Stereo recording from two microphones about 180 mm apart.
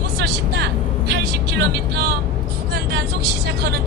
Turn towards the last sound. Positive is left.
turn(degrees=-70)  # may be behind; listen again after turning